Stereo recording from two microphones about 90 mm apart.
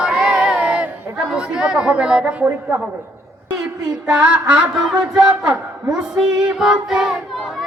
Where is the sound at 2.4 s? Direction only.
20° right (ahead or behind).